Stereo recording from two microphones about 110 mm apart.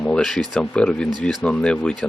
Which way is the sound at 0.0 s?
5° left (ahead or behind).